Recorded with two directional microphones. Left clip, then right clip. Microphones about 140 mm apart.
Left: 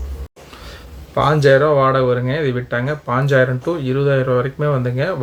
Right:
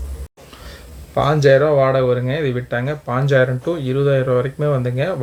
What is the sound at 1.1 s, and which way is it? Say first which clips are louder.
Speech: left 1 dB; 20° right (ahead or behind).